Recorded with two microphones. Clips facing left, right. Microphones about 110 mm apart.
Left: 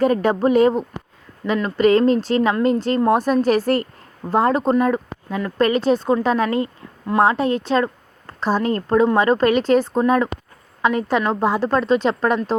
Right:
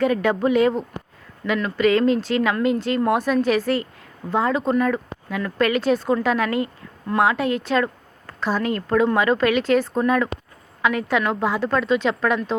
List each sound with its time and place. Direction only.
0.0 s speech: 40° left (ahead or behind)
4.7 s a woman's voice: 30° left (ahead or behind)